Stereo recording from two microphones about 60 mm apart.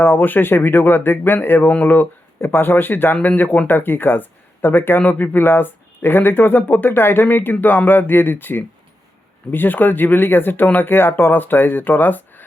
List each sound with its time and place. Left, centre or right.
0.0 s speech: left